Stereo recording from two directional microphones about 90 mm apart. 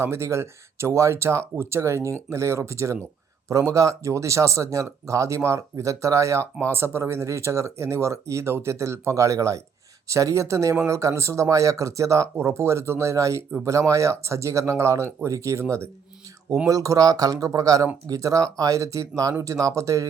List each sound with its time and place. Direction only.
0.0 s speech: 30° right (ahead or behind)